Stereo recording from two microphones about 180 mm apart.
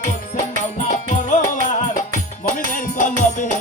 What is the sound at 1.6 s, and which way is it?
Music, 45° left (ahead or behind).